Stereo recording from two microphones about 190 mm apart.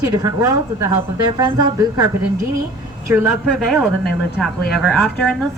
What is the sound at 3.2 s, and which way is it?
Speech, centre (ahead or behind).